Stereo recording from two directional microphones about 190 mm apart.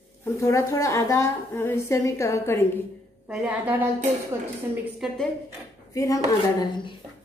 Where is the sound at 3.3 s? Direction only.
5° right (ahead or behind).